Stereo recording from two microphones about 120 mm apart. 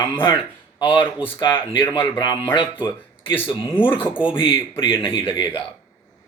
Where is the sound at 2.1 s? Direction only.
40° left (ahead or behind).